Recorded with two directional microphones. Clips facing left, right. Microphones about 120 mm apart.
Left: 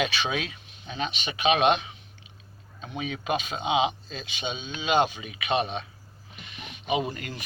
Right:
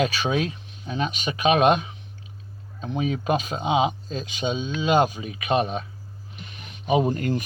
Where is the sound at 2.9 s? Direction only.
35° right (ahead or behind).